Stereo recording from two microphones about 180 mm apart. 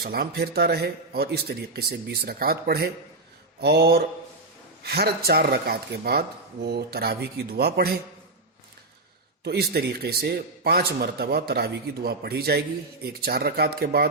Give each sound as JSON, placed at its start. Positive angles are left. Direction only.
{"t": 0.0, "sound": "a man's voice", "side_deg": -60}
{"t": 9.4, "sound": "a man's voice", "side_deg": -65}